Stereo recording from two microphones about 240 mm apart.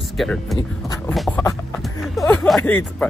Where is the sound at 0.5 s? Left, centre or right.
Centre.